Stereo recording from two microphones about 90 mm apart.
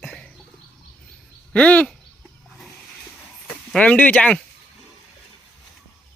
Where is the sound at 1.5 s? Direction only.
15° left (ahead or behind).